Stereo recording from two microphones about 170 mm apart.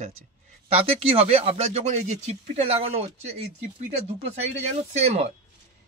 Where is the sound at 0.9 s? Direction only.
35° right (ahead or behind).